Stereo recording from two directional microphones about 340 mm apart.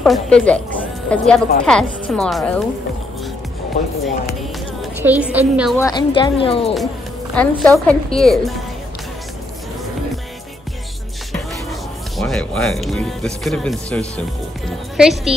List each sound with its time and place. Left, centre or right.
0.0 s speech: centre
3.8 s speech: left
5.0 s speech: centre
5.8 s a woman's voice: centre
7.3 s speech: centre
12.2 s speech: centre